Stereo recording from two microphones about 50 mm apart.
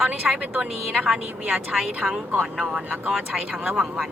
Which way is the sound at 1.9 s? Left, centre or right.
Right.